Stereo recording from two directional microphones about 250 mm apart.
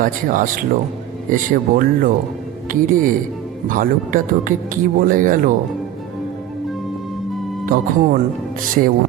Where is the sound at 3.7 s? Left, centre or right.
Right.